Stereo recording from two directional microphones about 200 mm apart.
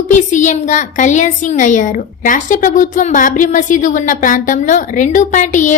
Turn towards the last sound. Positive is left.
turn(degrees=40)  # may be behind; listen again after turning